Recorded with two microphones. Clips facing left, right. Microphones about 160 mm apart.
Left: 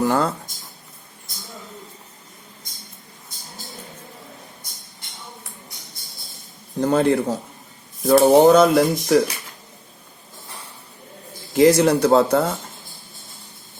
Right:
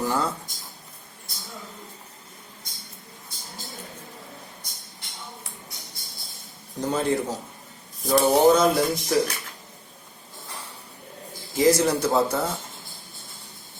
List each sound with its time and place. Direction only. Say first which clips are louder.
0.0 s a sound: left 6 dB; 55° left (ahead or behind)
6.8 s speech: left 6 dB; 60° left (ahead or behind)
11.5 s speech: left 6 dB; 65° left (ahead or behind)